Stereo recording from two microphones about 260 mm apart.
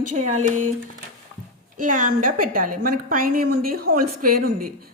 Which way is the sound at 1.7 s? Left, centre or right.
Right.